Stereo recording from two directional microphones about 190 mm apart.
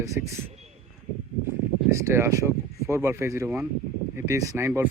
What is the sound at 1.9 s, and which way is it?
Speech, 15° right (ahead or behind).